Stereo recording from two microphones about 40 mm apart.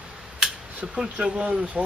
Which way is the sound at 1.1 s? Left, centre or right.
Right.